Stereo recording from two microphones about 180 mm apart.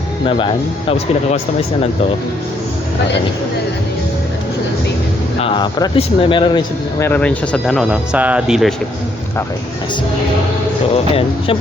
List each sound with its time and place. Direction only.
0.3 s speech: 30° left (ahead or behind)
5.4 s speech: 30° left (ahead or behind)
7.0 s speech: 10° left (ahead or behind)
11.1 s speech: 30° left (ahead or behind)